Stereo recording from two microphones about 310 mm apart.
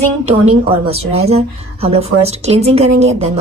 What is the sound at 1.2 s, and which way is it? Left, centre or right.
A woman's voice, centre.